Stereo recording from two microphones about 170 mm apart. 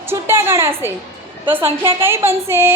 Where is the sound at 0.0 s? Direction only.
15° right (ahead or behind).